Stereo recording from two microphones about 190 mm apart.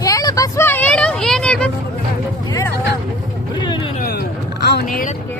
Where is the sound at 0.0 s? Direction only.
20° left (ahead or behind).